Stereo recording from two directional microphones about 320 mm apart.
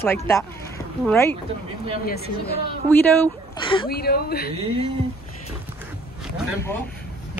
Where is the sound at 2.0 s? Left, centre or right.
Left.